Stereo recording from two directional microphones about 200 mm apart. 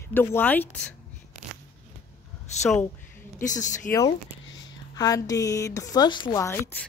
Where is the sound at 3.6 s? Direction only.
40° left (ahead or behind).